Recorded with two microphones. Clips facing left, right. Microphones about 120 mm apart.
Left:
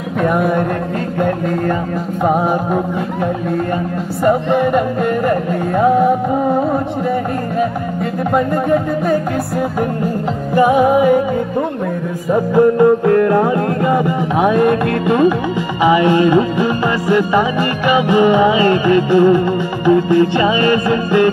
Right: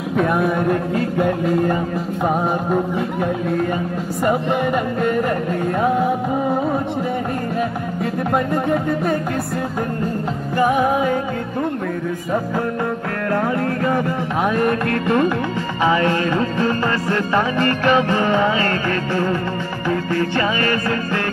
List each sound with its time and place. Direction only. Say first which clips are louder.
0.2 s music: left 3 dB; centre (ahead or behind)
4.2 s music: left 5 dB; 5° right (ahead or behind)
8.4 s music: left 6 dB; centre (ahead or behind)
10.5 s music: left 6 dB; 15° left (ahead or behind)
12.3 s music: left 12 dB; 15° left (ahead or behind)